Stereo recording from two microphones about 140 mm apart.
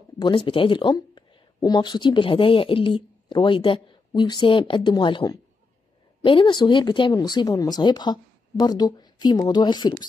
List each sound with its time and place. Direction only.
0.2 s speech: 35° left (ahead or behind)